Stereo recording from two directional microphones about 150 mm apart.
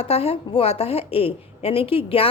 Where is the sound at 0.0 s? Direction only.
40° left (ahead or behind).